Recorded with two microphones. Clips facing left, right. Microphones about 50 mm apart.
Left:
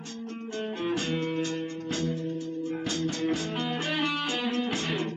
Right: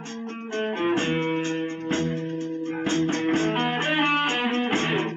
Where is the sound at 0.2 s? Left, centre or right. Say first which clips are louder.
Right 6 dB; right.